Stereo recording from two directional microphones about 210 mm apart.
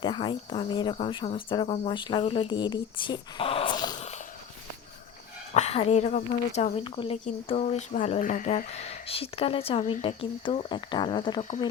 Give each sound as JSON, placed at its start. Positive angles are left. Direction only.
{"t": 0.0, "sound": "speech", "side_deg": 20}
{"t": 5.5, "sound": "speech", "side_deg": 35}